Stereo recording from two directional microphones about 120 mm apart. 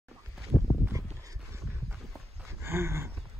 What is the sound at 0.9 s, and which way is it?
Dog, 25° right (ahead or behind).